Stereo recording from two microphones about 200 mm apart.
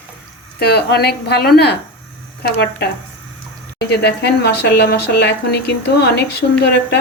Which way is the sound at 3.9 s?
55° left (ahead or behind).